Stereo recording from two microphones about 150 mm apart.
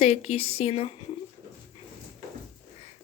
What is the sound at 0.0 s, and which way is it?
Speech, 40° left (ahead or behind).